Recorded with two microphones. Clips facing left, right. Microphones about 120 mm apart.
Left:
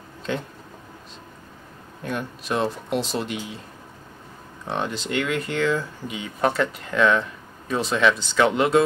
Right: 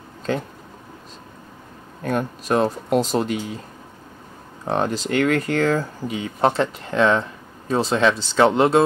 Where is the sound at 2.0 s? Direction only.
45° right (ahead or behind).